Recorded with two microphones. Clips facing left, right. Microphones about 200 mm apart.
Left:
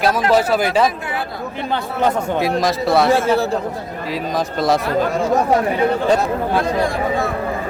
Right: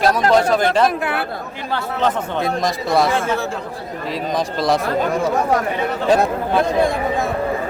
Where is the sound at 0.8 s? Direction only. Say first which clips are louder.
Right 2 dB; 60° right (ahead or behind).